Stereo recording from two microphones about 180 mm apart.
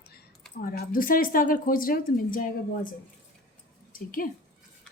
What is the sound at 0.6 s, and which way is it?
A woman's voice, 55° left (ahead or behind).